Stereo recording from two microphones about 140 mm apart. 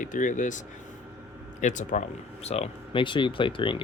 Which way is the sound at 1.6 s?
65° left (ahead or behind).